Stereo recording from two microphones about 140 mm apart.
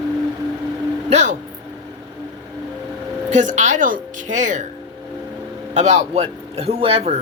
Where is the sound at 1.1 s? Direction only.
55° right (ahead or behind).